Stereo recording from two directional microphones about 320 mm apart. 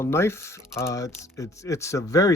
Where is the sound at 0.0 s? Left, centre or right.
Centre.